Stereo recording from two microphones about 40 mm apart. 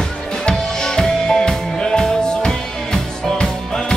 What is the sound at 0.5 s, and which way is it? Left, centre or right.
Music, centre.